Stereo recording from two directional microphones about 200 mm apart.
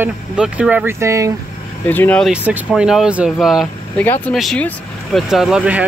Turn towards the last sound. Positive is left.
turn(degrees=-5)  # may be behind; listen again after turning